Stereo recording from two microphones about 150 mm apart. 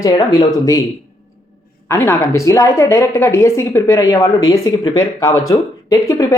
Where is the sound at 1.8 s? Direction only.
20° left (ahead or behind).